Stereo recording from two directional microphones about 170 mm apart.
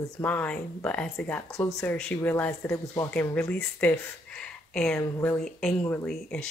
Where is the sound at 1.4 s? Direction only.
20° left (ahead or behind).